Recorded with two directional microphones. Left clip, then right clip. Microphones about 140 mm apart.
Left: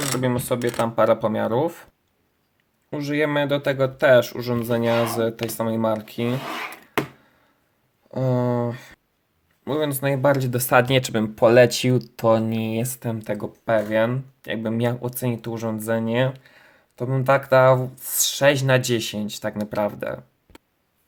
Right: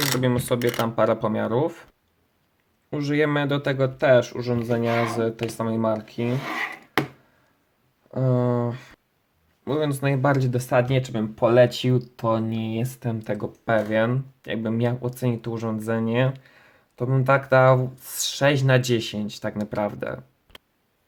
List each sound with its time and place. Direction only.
0.2 s speech: 5° left (ahead or behind)
2.9 s speech: centre (ahead or behind); by 6.3 s 20° left (ahead or behind)
6.4 s a sound: centre (ahead or behind)
8.1 s speech: 15° left (ahead or behind)
10.6 s speech: 30° left (ahead or behind)
12.5 s speech: 30° left (ahead or behind); by 20.1 s 5° left (ahead or behind)